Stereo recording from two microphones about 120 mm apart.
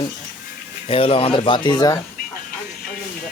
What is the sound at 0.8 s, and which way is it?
Speech, 50° left (ahead or behind).